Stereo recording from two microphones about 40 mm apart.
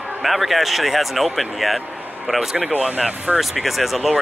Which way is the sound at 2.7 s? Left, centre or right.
Right.